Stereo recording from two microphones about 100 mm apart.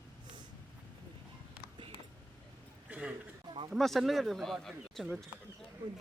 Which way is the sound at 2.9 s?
10° right (ahead or behind).